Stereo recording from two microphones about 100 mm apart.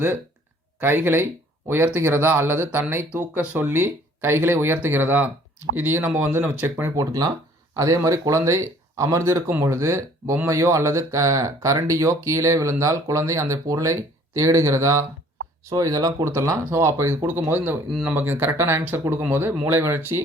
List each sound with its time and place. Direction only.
0.8 s speech: 20° right (ahead or behind)